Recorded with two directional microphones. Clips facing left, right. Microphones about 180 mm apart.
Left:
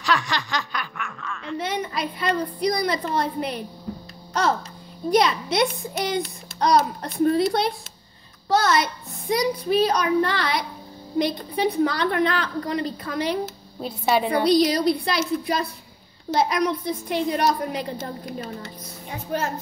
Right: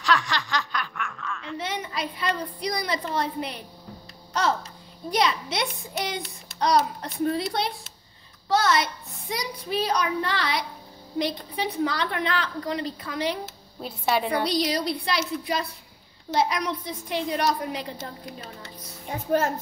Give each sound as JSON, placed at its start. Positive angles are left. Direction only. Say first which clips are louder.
{"t": 0.0, "sound": "snicker", "louder": "left 1 dB", "side_deg": 10}
{"t": 1.6, "sound": "a woman's voice", "louder": "left 4 dB", "side_deg": 50}
{"t": 13.7, "sound": "speech", "louder": "left 3 dB", "side_deg": 0}
{"t": 14.4, "sound": "a child's voice", "louder": "left 7 dB", "side_deg": 50}